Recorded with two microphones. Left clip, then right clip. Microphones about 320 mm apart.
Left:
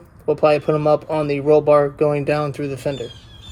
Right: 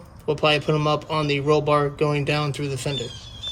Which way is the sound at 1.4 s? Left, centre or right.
Left.